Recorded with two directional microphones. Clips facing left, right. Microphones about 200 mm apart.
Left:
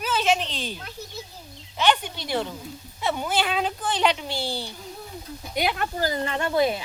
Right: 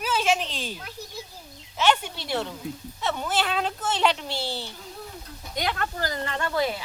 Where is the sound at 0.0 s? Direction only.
5° right (ahead or behind).